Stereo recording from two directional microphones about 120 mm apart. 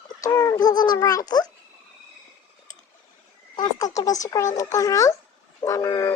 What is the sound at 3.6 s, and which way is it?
Speech, 30° left (ahead or behind).